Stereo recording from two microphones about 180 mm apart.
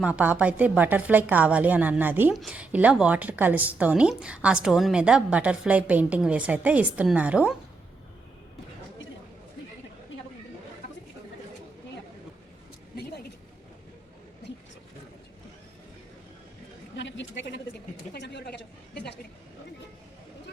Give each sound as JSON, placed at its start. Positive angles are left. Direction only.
{"t": 0.0, "sound": "a woman's voice", "side_deg": -10}
{"t": 17.0, "sound": "a sound", "side_deg": 85}
{"t": 18.1, "sound": "speech", "side_deg": 70}